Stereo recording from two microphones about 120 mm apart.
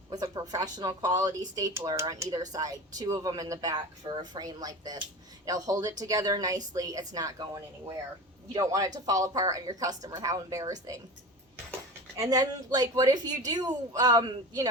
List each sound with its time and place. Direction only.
0.1 s a woman's voice: 30° right (ahead or behind)
12.2 s a woman's voice: 30° right (ahead or behind)